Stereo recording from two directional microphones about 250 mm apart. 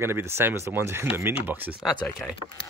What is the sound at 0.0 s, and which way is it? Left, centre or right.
Speech, centre.